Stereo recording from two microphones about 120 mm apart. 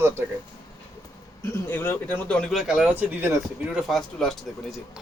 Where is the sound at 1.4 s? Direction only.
20° left (ahead or behind).